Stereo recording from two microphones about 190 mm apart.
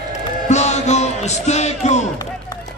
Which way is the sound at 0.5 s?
35° left (ahead or behind).